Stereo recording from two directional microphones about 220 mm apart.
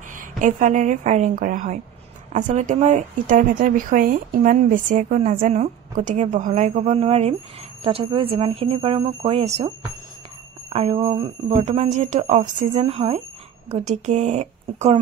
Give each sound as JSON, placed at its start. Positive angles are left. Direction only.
{"t": 0.2, "sound": "speech", "side_deg": -35}
{"t": 10.7, "sound": "speech", "side_deg": -25}